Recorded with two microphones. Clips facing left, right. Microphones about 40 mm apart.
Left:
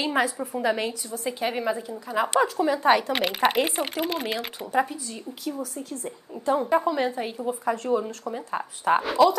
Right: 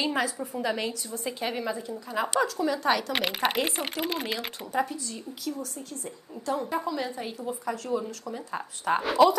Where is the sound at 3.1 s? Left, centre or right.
Centre.